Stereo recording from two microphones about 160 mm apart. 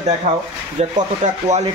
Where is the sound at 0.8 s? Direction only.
45° right (ahead or behind).